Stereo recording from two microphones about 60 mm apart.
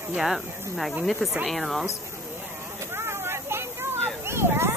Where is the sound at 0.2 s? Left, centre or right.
Centre.